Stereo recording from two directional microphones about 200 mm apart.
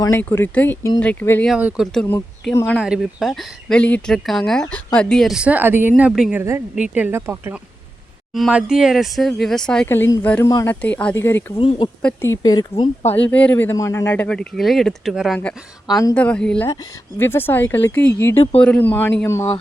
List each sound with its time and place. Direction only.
0.0 s speech: 10° left (ahead or behind)
1.5 s speech: 5° right (ahead or behind)
2.8 s speech: centre (ahead or behind); by 13.1 s 25° left (ahead or behind)
13.1 s speech: 5° left (ahead or behind)
15.9 s speech: 15° left (ahead or behind)
16.1 s speech: 5° left (ahead or behind)